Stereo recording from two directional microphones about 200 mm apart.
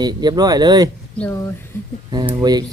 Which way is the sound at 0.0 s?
20° right (ahead or behind).